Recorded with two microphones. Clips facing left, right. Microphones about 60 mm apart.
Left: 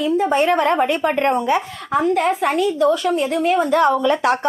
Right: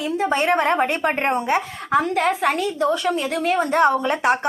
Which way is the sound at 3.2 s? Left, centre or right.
Right.